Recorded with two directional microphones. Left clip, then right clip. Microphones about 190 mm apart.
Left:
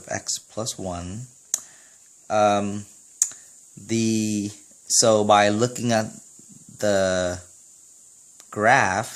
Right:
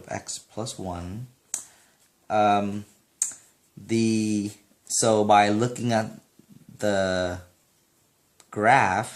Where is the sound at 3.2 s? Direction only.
45° left (ahead or behind).